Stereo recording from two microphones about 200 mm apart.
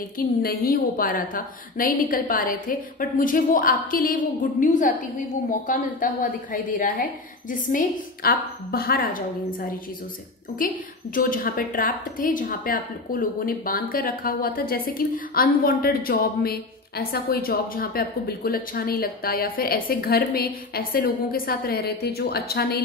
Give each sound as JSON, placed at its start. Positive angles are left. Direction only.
{"t": 0.2, "sound": "a woman's voice", "side_deg": 45}